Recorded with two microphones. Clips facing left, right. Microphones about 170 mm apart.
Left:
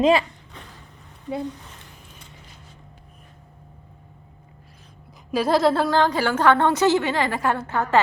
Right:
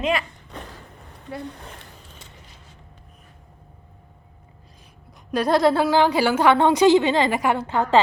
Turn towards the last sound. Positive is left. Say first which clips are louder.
# right 2 dB
turn(degrees=-15)  # may be behind; listen again after turning